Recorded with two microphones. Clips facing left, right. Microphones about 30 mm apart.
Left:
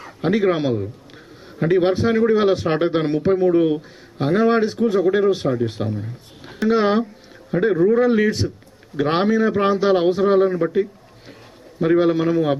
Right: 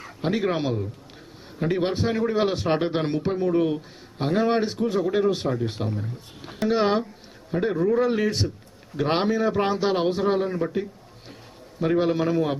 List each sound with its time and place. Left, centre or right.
0.0 s a man's voice: centre
1.9 s a man's voice: centre
5.4 s speech: left
5.9 s speech: centre
7.7 s a man's voice: centre
10.6 s a man's voice: centre
11.8 s a man's voice: centre